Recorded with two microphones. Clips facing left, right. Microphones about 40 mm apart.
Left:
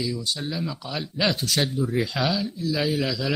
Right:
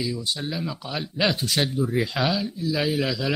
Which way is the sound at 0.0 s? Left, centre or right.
Centre.